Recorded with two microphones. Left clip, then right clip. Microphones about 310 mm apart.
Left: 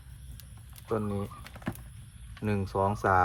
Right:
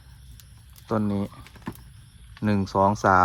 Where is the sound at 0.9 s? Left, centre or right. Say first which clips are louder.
Right 5 dB; right.